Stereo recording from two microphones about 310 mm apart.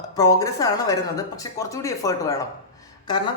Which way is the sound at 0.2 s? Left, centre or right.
Centre.